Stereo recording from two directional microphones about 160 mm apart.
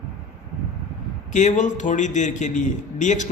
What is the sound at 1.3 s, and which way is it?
A man's voice, 50° left (ahead or behind).